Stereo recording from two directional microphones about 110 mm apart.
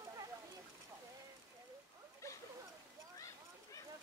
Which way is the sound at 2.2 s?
30° left (ahead or behind).